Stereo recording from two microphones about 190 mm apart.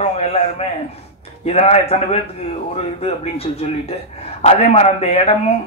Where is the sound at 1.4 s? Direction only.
35° left (ahead or behind).